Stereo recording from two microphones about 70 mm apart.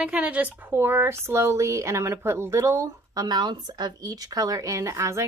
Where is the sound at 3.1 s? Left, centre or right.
Right.